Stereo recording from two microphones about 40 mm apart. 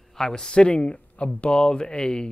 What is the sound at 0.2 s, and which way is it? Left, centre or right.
Speech, centre.